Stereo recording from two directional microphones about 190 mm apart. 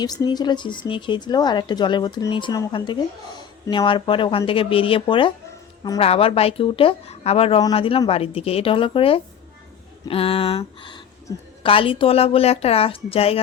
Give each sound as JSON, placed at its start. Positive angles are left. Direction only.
{"t": 0.0, "sound": "a woman's voice", "side_deg": 20}